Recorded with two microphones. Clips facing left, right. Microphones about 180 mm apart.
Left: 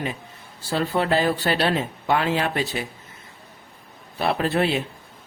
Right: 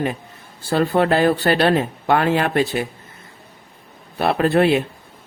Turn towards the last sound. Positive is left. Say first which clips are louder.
# right 6 dB
turn(degrees=-55)  # may be behind; listen again after turning